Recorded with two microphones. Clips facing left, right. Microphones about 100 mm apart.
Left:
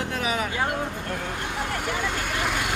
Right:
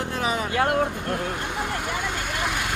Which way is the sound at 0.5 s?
60° right (ahead or behind).